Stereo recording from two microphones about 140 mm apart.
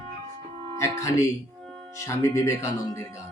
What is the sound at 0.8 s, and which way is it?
Mantra, 20° left (ahead or behind).